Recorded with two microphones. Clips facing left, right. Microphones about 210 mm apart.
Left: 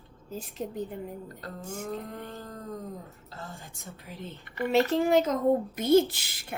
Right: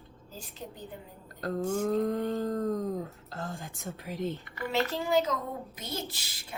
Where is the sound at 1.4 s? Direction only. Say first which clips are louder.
Right 11 dB; 45° right (ahead or behind).